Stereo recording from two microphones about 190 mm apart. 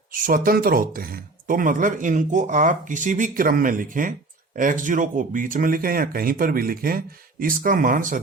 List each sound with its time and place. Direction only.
0.1 s speech: 45° right (ahead or behind)